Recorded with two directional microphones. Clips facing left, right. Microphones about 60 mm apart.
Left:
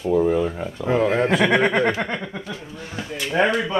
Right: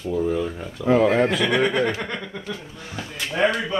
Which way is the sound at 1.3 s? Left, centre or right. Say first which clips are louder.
Left 3 dB; left.